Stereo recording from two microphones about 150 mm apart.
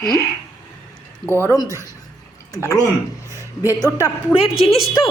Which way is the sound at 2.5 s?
20° left (ahead or behind).